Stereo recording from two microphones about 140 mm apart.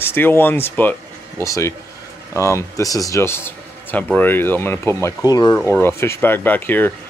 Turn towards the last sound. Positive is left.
turn(degrees=15)  # may be behind; listen again after turning